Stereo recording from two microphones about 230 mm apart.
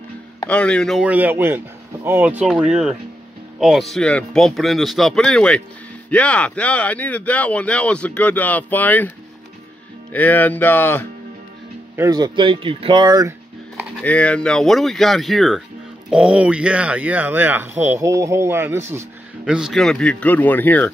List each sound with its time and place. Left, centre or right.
0.5 s speech: centre
10.1 s speech: centre
12.0 s speech: centre
13.9 s speech: centre